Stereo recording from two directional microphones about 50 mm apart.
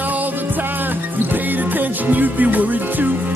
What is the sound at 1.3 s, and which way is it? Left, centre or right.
Music, right.